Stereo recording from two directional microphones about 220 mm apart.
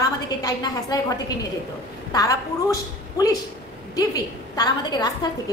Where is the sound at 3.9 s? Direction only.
20° left (ahead or behind).